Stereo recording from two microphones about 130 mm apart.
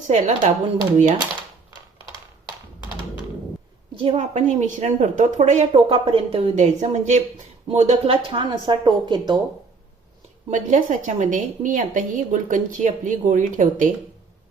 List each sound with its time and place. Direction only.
0.1 s a woman's voice: 65° right (ahead or behind)
3.9 s a woman's voice: 50° right (ahead or behind); by 5.6 s 65° right (ahead or behind)
5.7 s a woman's voice: 45° right (ahead or behind)
8.1 s a woman's voice: 40° right (ahead or behind)
10.5 s a woman's voice: 70° right (ahead or behind)